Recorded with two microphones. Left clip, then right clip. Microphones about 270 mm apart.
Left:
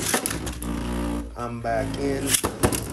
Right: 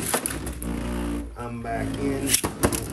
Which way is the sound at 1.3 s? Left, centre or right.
Centre.